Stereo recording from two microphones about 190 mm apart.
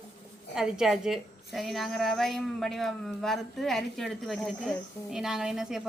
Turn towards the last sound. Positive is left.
turn(degrees=0)  # may be behind; listen again after turning